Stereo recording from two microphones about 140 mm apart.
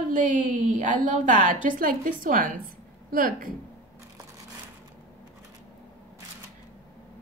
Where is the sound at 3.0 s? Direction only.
90° right.